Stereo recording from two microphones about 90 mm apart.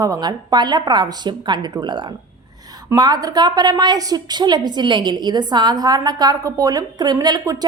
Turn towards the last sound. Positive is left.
turn(degrees=-40)  # may be behind; listen again after turning